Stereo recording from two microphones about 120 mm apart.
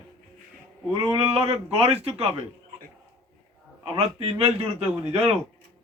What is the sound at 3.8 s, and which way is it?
A man's voice, 50° right (ahead or behind).